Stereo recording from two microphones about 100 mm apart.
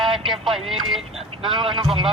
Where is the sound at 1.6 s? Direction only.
55° right (ahead or behind).